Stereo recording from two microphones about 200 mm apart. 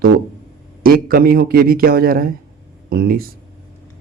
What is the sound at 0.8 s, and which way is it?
A man's voice, 45° right (ahead or behind).